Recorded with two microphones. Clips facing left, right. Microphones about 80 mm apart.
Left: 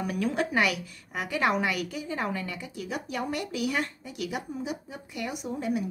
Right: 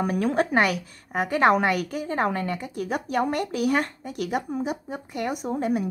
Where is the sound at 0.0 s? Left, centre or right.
Right.